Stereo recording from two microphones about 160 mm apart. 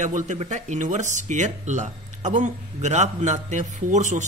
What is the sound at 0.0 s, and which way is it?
Speech, 50° right (ahead or behind).